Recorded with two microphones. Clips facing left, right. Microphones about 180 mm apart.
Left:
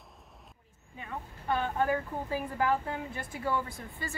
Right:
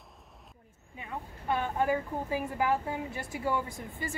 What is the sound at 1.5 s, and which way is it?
A woman's voice, 15° right (ahead or behind).